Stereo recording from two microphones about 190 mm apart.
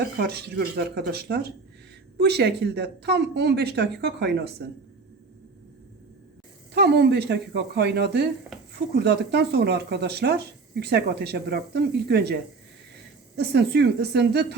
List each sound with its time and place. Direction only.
0.0 s speech: 60° right (ahead or behind)
6.7 s speech: 60° right (ahead or behind)
8.5 s dishes: centre (ahead or behind)
9.0 s speech: 60° right (ahead or behind)